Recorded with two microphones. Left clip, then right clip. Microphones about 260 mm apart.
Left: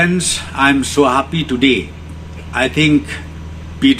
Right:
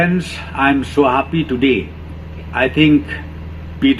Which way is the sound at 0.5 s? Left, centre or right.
Left.